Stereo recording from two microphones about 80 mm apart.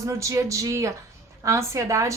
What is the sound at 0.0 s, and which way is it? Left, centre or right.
A woman's voice, right.